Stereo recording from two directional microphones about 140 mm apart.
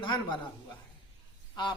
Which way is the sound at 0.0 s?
35° left (ahead or behind).